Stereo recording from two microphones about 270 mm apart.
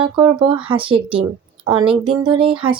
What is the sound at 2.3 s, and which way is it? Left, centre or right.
Speech, centre.